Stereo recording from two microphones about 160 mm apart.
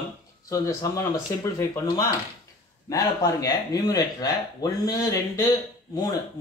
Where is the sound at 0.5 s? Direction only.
20° left (ahead or behind).